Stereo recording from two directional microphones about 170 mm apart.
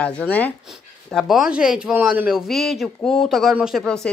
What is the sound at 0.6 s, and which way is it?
Speech, centre (ahead or behind).